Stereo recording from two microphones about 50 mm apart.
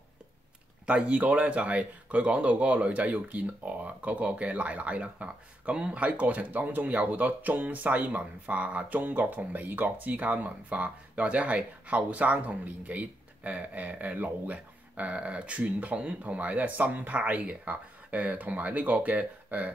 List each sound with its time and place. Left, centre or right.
0.8 s speech: right